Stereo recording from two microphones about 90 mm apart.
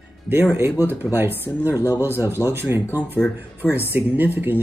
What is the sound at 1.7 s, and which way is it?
Speech, 40° left (ahead or behind).